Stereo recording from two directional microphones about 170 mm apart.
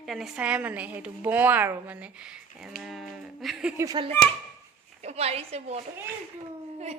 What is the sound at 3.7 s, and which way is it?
Speech, 20° right (ahead or behind).